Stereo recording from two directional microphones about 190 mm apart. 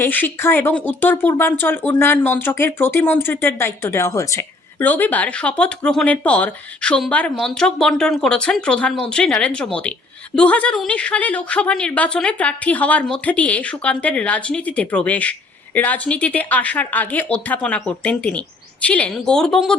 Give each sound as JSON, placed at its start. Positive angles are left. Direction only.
{"t": 0.0, "sound": "speech", "side_deg": 10}